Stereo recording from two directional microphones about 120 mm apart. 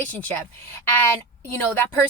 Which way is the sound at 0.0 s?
15° left (ahead or behind).